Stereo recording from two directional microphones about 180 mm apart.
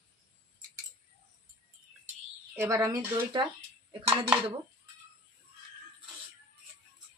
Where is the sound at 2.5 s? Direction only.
15° right (ahead or behind).